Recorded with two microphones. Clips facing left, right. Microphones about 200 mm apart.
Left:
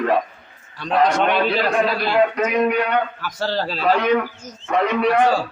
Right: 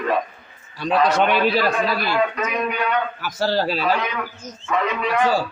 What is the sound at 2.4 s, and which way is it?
Speech, 65° left (ahead or behind).